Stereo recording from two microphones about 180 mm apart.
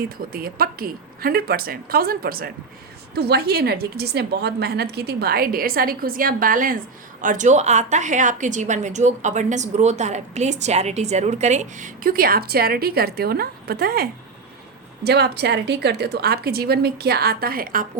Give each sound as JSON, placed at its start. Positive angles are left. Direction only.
{"t": 0.3, "sound": "a woman's voice", "side_deg": -55}